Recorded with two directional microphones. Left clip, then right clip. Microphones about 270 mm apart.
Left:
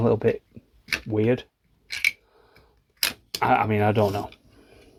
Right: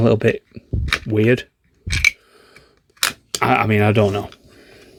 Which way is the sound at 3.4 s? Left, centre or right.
Right.